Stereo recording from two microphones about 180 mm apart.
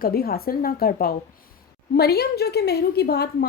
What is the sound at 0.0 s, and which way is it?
A woman's voice, 55° left (ahead or behind).